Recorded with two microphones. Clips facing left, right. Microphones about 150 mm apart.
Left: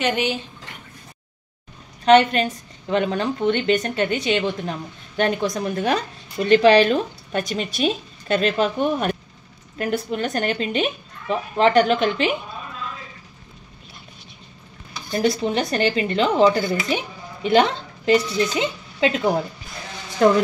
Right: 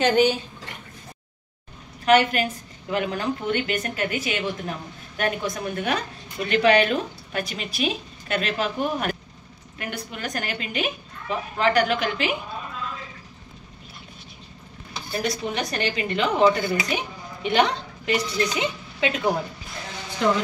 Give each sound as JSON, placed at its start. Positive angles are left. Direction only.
{"t": 0.0, "sound": "speech", "side_deg": -40}
{"t": 2.0, "sound": "speech", "side_deg": 30}
{"t": 15.2, "sound": "speech", "side_deg": 30}